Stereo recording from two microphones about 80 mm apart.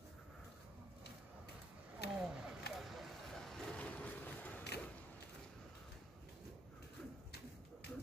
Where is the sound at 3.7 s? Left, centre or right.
Centre.